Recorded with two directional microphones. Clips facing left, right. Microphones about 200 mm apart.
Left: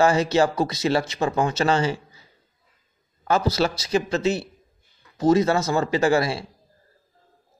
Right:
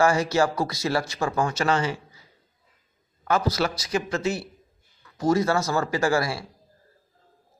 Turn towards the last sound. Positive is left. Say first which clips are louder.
# left 3 dB
turn(degrees=25)  # may be behind; listen again after turning